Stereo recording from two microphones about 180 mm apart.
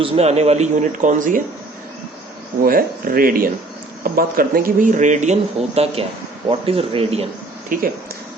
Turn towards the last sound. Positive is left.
turn(degrees=-50)  # may be behind; listen again after turning